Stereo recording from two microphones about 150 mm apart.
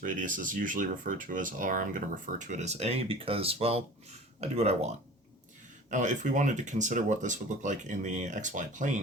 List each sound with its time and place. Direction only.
0.0 s speech: 60° right (ahead or behind)
5.9 s speech: 55° right (ahead or behind)